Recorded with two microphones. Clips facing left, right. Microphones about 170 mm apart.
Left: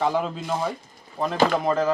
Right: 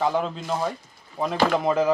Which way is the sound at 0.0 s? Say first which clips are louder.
Even; centre (ahead or behind).